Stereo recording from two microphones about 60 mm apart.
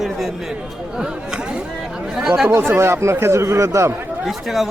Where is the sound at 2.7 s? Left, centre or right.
Right.